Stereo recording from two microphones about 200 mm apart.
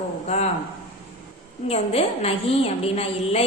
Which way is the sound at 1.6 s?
30° left (ahead or behind).